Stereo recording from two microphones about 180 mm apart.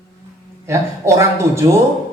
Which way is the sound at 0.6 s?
15° right (ahead or behind).